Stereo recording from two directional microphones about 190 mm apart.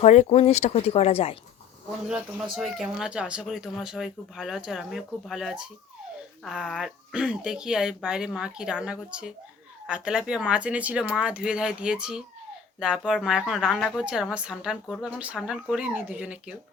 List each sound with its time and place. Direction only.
0.0 s speech: 35° left (ahead or behind)
2.0 s speech: 5° right (ahead or behind)